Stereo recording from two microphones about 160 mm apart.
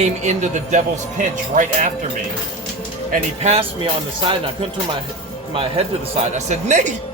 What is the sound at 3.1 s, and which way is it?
Speech, 40° right (ahead or behind).